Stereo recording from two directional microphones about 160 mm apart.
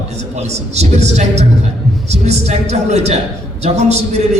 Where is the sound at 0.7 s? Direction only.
45° right (ahead or behind).